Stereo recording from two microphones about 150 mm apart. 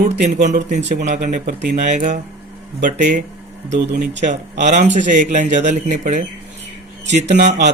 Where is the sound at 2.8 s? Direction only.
75° right (ahead or behind).